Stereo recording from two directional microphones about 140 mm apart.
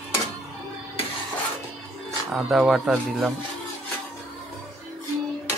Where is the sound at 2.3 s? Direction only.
5° right (ahead or behind).